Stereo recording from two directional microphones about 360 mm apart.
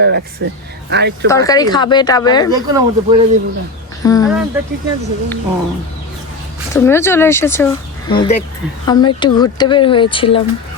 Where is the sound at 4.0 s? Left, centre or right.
Centre.